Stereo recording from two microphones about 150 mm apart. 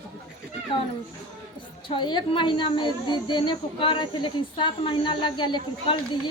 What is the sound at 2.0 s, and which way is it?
Speech, 30° left (ahead or behind).